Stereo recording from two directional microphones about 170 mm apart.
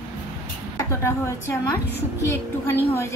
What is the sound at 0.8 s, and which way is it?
A woman's voice, 15° left (ahead or behind).